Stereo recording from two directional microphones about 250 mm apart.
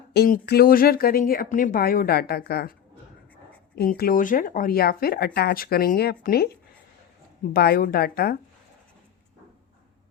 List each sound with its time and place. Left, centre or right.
0.1 s speech: left
3.8 s speech: left
7.5 s speech: left